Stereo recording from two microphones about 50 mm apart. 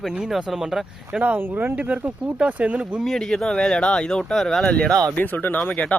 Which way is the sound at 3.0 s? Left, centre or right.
Centre.